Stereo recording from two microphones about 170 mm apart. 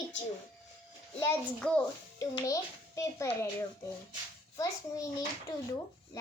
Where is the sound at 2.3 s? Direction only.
20° left (ahead or behind).